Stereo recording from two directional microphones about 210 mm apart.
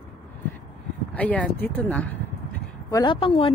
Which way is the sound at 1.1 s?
5° left (ahead or behind).